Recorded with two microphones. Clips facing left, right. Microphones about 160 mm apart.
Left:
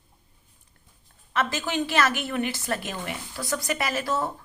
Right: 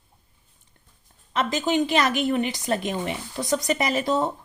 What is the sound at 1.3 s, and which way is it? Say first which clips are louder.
A woman's voice: right 4 dB; 15° right (ahead or behind).